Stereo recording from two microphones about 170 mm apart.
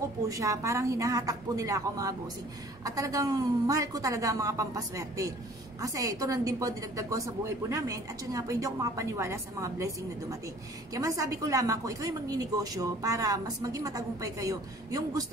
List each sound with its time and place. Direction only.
0.3 s a woman's voice: 20° right (ahead or behind)
10.9 s a woman's voice: 20° right (ahead or behind)